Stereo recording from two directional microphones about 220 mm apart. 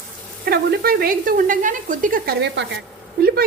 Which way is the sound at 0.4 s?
45° right (ahead or behind).